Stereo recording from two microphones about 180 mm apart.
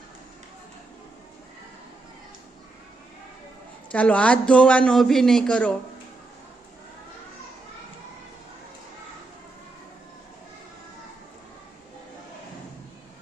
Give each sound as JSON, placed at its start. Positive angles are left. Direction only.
{"t": 3.9, "sound": "a woman's voice", "side_deg": 10}